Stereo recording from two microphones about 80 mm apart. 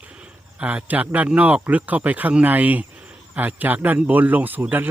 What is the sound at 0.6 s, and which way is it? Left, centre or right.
Speech, centre.